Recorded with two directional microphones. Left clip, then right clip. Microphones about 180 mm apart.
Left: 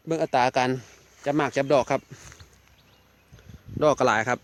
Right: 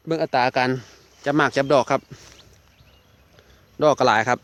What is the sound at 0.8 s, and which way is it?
Speech, 10° right (ahead or behind).